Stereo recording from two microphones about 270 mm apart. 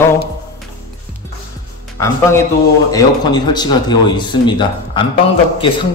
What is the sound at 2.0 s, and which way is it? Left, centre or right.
A man's voice, centre.